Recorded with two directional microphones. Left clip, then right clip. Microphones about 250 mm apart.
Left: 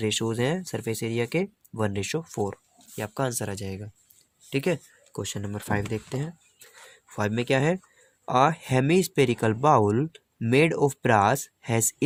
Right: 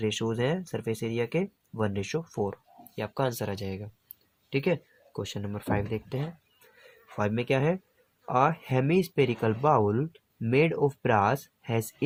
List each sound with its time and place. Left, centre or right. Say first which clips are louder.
0.0 s speech: left 2 dB; left